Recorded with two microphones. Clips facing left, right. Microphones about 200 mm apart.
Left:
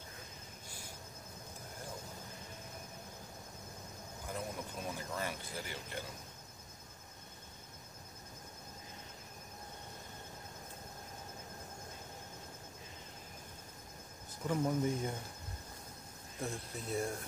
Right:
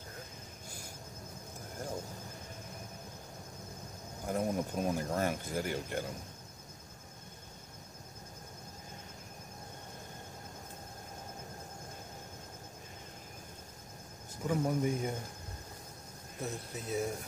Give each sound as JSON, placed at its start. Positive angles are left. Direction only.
{"t": 4.3, "sound": "speech", "side_deg": -45}
{"t": 14.5, "sound": "speech", "side_deg": -15}
{"t": 16.3, "sound": "speech", "side_deg": 0}